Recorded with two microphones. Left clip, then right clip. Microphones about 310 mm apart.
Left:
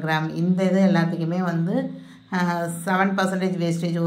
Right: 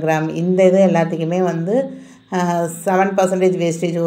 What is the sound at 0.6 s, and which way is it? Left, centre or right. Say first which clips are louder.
Speech: right 10 dB; right.